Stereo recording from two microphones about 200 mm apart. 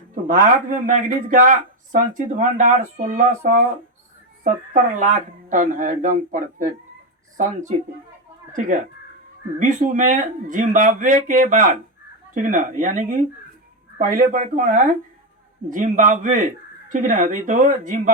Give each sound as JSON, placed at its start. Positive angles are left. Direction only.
{"t": 0.3, "sound": "speech", "side_deg": -40}
{"t": 9.6, "sound": "speech", "side_deg": -40}